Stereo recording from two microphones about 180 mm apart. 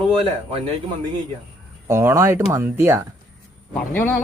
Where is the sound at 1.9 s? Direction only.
15° right (ahead or behind).